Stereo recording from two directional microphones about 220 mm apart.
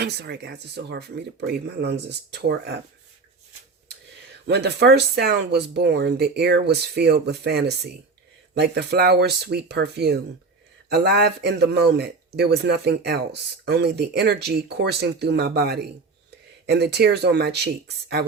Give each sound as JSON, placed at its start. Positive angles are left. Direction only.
{"t": 0.0, "sound": "speech", "side_deg": -45}
{"t": 4.4, "sound": "speech", "side_deg": -50}